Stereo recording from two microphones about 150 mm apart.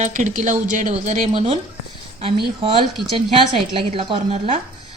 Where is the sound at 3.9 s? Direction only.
40° right (ahead or behind).